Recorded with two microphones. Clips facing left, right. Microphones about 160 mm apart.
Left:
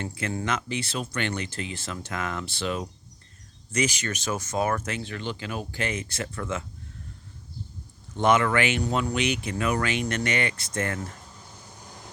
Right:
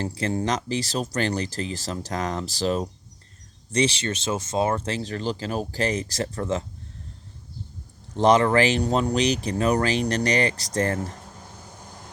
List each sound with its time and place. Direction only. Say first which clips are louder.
0.0 s speech: right 5 dB; 35° right (ahead or behind)
8.1 s speech: right 4 dB; 35° right (ahead or behind)